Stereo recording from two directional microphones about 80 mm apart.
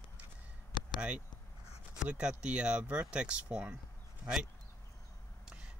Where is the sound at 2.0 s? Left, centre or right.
Centre.